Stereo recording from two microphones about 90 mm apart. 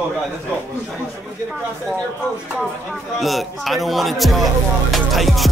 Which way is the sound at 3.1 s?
Centre (ahead or behind).